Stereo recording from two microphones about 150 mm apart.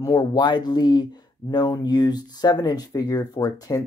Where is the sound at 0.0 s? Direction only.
25° left (ahead or behind).